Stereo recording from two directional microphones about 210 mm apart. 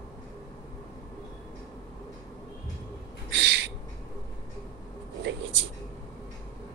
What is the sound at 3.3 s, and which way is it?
Owl, 60° right (ahead or behind).